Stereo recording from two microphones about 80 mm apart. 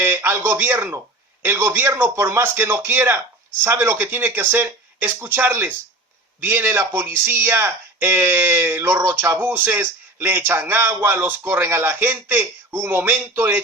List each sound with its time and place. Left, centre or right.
0.0 s speech: right